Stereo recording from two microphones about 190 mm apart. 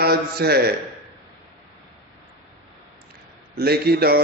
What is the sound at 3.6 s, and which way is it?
Speech, 55° right (ahead or behind).